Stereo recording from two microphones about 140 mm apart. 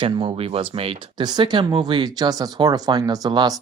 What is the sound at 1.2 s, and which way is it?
Speech, 30° right (ahead or behind).